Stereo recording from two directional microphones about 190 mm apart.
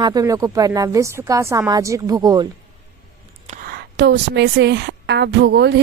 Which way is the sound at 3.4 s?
50° right (ahead or behind).